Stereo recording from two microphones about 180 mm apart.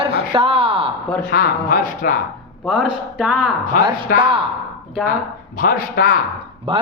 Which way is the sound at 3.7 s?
55° left (ahead or behind).